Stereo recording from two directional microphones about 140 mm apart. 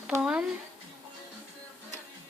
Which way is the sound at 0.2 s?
10° right (ahead or behind).